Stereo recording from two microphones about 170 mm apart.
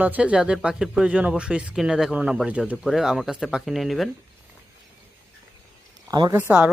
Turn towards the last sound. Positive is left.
turn(degrees=-10)  # may be behind; listen again after turning